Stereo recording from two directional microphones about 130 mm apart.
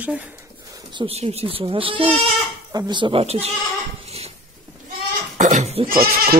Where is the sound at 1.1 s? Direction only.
50° right (ahead or behind).